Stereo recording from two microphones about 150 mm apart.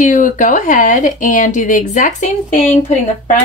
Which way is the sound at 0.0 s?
60° left (ahead or behind).